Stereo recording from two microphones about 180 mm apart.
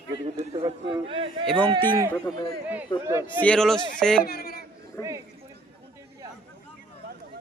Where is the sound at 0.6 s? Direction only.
30° right (ahead or behind).